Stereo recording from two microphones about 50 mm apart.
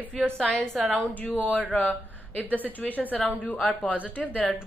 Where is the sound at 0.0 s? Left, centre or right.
Right.